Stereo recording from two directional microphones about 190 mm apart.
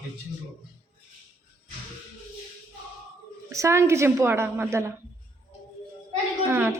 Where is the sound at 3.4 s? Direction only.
15° right (ahead or behind).